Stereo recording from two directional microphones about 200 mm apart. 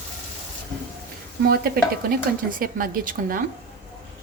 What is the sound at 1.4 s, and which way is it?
Speech, 50° right (ahead or behind).